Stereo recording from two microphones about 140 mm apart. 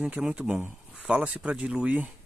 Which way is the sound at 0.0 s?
5° right (ahead or behind).